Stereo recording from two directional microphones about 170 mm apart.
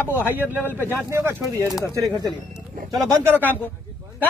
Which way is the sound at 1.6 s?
20° left (ahead or behind).